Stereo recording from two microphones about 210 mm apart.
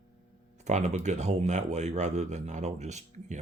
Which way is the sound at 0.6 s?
35° right (ahead or behind).